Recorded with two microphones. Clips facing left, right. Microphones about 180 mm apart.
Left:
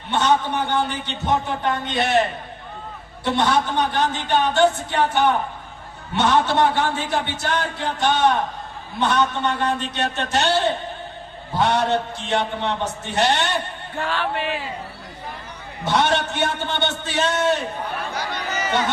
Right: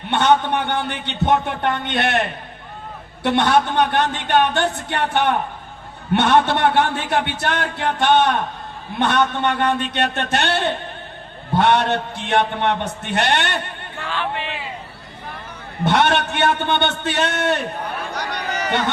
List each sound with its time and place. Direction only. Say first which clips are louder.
0.1 s a man's voice: right 3 dB; 60° right (ahead or behind)
3.2 s a man's voice: right 3 dB; 60° right (ahead or behind)
14.0 s speech: left 2 dB; 40° left (ahead or behind)
15.8 s a man's voice: right 3 dB; 60° right (ahead or behind)